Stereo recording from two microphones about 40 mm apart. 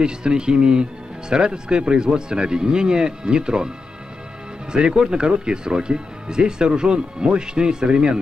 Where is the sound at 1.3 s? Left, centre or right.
Right.